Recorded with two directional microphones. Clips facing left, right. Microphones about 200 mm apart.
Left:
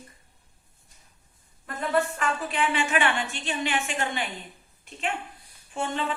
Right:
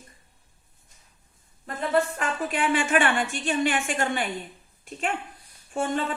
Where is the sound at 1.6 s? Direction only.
40° right (ahead or behind).